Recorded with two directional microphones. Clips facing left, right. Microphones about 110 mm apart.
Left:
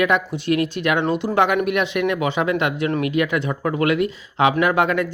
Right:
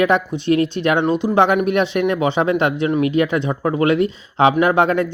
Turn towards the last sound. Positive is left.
turn(degrees=-30)  # may be behind; listen again after turning